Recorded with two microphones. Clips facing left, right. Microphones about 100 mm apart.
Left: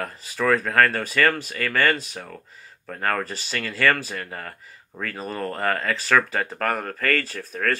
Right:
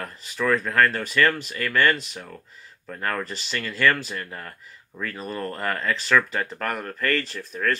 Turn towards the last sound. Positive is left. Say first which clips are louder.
# even
turn(degrees=50)  # may be behind; listen again after turning